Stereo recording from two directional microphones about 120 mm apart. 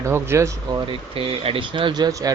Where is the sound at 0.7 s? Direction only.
45° right (ahead or behind); by 2.3 s 30° right (ahead or behind).